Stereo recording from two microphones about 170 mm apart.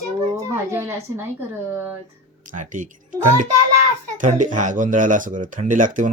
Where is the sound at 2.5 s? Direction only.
50° right (ahead or behind).